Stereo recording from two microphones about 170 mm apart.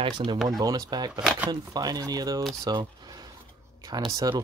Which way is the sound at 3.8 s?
25° right (ahead or behind).